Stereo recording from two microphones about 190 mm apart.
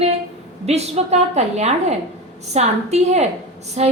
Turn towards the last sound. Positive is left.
turn(degrees=-35)  # may be behind; listen again after turning